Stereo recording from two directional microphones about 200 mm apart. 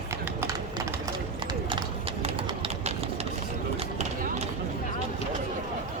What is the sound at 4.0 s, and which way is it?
Clip-clop, 35° right (ahead or behind).